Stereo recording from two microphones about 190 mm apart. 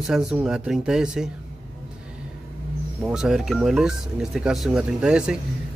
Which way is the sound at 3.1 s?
5° right (ahead or behind).